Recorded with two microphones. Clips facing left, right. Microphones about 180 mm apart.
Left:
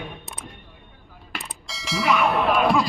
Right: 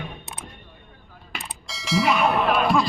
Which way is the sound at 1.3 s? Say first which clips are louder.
Even; centre (ahead or behind).